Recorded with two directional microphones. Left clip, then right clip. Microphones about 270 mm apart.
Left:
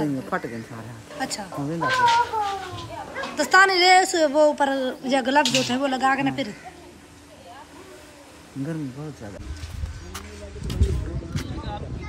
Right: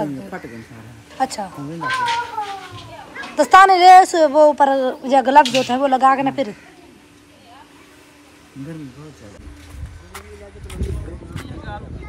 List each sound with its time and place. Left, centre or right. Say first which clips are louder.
1.1 s a woman's voice: right 8 dB; centre
1.7 s children playing: left 2 dB; left
3.3 s a woman's voice: right 7 dB; centre
5.4 s speech: right 7 dB; left
5.7 s a woman's voice: right 8 dB; centre